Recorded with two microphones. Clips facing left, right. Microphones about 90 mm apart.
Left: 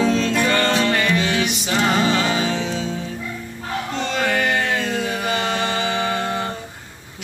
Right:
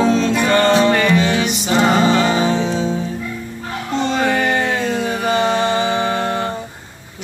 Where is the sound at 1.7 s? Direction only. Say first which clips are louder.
Right 5 dB; 20° right (ahead or behind).